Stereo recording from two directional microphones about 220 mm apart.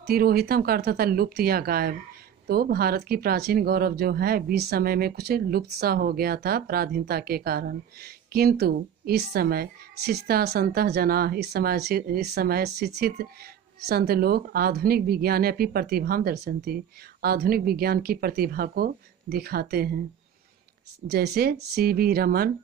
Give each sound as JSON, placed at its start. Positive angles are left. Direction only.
{"t": 0.0, "sound": "speech", "side_deg": -45}
{"t": 21.1, "sound": "speech", "side_deg": -45}